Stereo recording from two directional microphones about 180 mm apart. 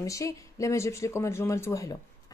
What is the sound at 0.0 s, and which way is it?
Speech, 20° left (ahead or behind).